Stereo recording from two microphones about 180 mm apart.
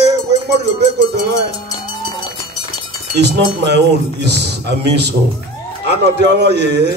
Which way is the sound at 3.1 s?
70° right (ahead or behind).